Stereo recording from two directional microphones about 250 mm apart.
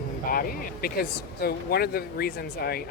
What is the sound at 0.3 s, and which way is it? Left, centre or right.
Speech, left.